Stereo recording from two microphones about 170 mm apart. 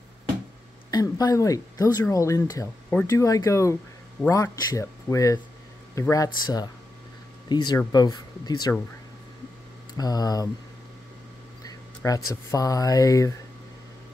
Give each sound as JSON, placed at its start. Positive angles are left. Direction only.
{"t": 0.9, "sound": "speech", "side_deg": 25}
{"t": 9.9, "sound": "speech", "side_deg": 20}
{"t": 11.6, "sound": "speech", "side_deg": 20}